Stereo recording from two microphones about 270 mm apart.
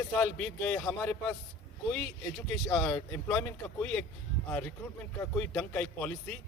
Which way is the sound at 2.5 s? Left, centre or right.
Centre.